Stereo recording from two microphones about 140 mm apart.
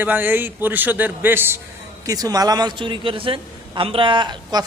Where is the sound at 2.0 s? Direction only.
25° right (ahead or behind).